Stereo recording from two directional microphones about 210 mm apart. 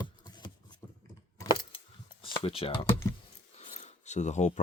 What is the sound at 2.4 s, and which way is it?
Speech, 25° left (ahead or behind).